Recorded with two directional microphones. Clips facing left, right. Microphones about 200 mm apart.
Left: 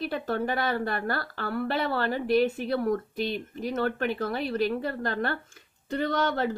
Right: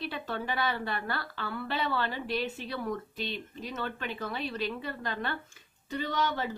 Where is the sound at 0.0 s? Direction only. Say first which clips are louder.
Left 7 dB; 55° left (ahead or behind).